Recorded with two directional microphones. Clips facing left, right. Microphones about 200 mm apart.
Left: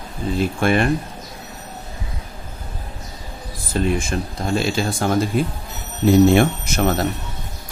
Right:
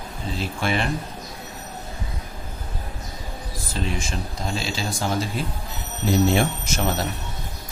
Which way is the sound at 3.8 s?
55° left (ahead or behind).